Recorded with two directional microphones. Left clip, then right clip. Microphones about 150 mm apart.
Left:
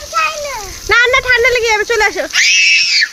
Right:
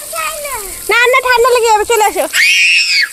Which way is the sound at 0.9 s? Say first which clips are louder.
Right 1 dB; 15° right (ahead or behind).